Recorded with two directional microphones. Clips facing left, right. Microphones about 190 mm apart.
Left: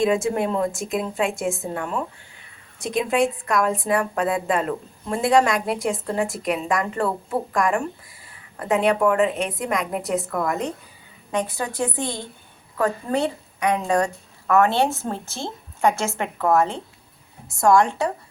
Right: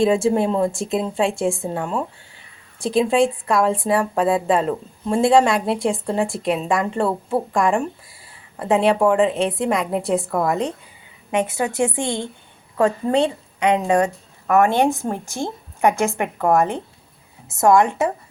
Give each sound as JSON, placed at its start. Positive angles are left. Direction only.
{"t": 0.0, "sound": "a woman's voice", "side_deg": -30}
{"t": 11.3, "sound": "a woman's voice", "side_deg": -20}